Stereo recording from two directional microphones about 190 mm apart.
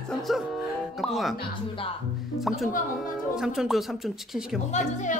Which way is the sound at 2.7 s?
45° left (ahead or behind).